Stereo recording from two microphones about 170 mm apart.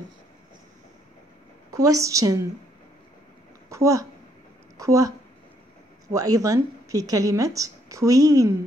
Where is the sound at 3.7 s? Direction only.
20° right (ahead or behind).